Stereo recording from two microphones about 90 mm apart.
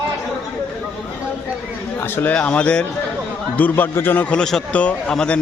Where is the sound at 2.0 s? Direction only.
25° left (ahead or behind).